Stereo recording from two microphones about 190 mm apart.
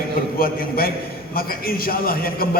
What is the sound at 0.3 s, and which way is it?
A man's voice, 50° left (ahead or behind).